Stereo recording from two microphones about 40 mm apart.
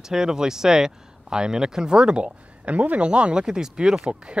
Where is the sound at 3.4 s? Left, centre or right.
Centre.